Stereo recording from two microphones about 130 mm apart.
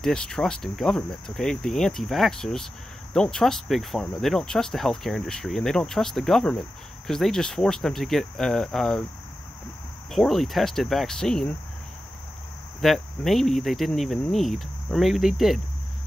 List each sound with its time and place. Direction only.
0.0 s speech: 5° left (ahead or behind)
10.1 s speech: centre (ahead or behind)
12.8 s speech: centre (ahead or behind)